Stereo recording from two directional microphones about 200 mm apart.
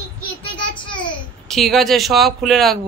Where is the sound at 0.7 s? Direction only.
25° left (ahead or behind).